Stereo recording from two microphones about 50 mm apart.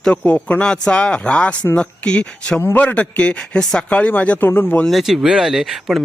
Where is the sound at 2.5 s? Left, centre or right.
Left; by 3.8 s centre.